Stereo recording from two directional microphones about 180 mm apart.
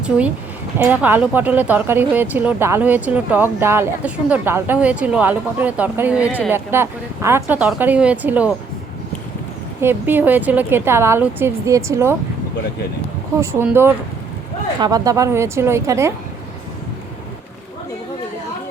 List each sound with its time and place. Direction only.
0.8 s speech: 10° right (ahead or behind)
9.8 s speech: 10° right (ahead or behind)
13.4 s speech: 15° right (ahead or behind)